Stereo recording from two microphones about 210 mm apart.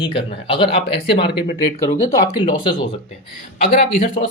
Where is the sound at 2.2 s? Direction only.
20° left (ahead or behind).